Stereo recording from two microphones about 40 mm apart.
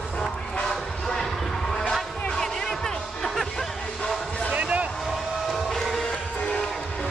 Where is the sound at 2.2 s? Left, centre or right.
Centre.